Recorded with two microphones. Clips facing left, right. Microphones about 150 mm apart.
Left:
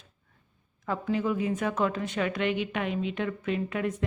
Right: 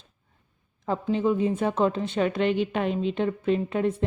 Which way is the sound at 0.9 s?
25° right (ahead or behind).